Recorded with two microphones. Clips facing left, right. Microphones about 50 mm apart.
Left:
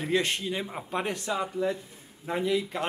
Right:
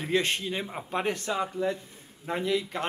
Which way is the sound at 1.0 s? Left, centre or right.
Right.